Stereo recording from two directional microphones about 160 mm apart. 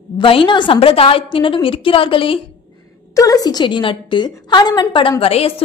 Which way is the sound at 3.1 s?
20° left (ahead or behind).